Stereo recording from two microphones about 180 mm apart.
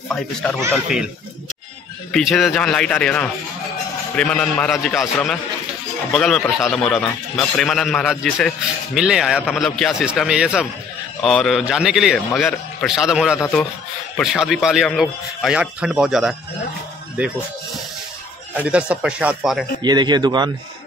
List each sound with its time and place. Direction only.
0.1 s a man's voice: 5° left (ahead or behind)
2.1 s a man's voice: centre (ahead or behind)
18.5 s a man's voice: 5° right (ahead or behind)
19.8 s a man's voice: 25° right (ahead or behind)